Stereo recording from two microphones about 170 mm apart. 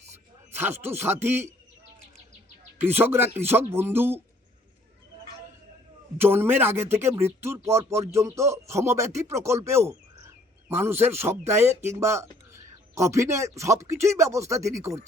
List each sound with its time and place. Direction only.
0.5 s a man's voice: 15° right (ahead or behind)
2.8 s a man's voice: 15° right (ahead or behind)
6.1 s a man's voice: 10° right (ahead or behind)